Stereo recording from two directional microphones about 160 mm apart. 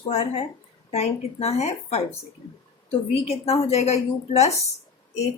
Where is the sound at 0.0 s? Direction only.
40° left (ahead or behind).